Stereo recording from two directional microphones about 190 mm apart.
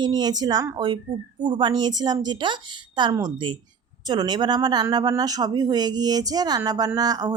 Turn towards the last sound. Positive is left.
turn(degrees=-20)  # may be behind; listen again after turning